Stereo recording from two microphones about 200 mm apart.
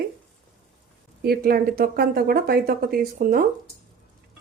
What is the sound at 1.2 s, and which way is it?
Speech, 50° right (ahead or behind).